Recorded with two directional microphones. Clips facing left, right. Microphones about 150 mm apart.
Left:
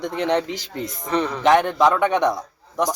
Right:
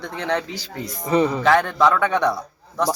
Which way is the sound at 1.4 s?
20° left (ahead or behind).